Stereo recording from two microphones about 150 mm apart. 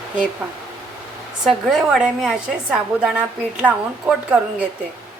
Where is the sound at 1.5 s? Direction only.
Centre (ahead or behind).